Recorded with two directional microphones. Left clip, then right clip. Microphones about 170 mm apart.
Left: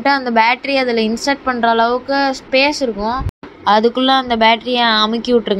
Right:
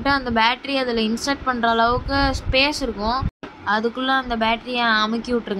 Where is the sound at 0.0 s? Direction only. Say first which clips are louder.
Left 6 dB; 15° left (ahead or behind).